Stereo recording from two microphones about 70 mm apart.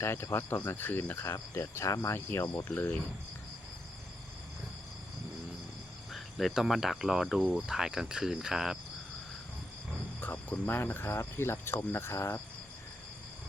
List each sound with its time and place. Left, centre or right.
0.0 s speech: left
1.3 s cricket: left
6.1 s speech: centre
7.5 s cricket: centre
10.2 s speech: left